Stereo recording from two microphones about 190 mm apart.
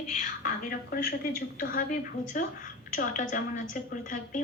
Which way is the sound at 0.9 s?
50° left (ahead or behind).